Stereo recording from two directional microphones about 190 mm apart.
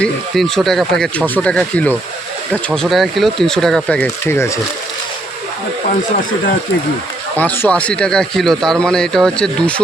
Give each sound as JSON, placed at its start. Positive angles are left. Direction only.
{"t": 0.0, "sound": "speech", "side_deg": 0}
{"t": 4.4, "sound": "speech", "side_deg": 15}
{"t": 7.3, "sound": "speech", "side_deg": 10}